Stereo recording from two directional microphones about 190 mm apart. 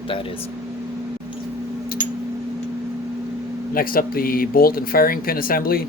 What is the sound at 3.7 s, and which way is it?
Speech, 50° left (ahead or behind).